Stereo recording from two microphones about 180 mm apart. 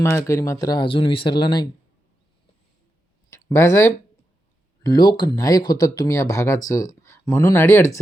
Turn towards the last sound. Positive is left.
turn(degrees=15)  # may be behind; listen again after turning